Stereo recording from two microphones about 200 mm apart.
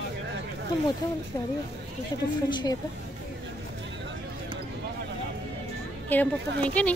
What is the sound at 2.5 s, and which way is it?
Speech, 20° left (ahead or behind).